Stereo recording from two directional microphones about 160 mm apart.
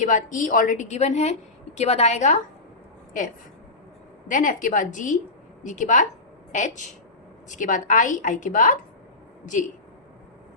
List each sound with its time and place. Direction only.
0.0 s a woman's voice: 50° left (ahead or behind)
4.3 s a woman's voice: 55° left (ahead or behind)